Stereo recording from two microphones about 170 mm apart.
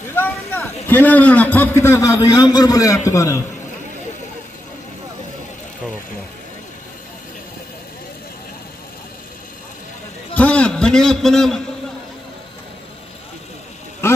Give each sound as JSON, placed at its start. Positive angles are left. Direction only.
{"t": 0.1, "sound": "a sound", "side_deg": 10}
{"t": 1.8, "sound": "a man's voice", "side_deg": 15}
{"t": 10.3, "sound": "a man's voice", "side_deg": 10}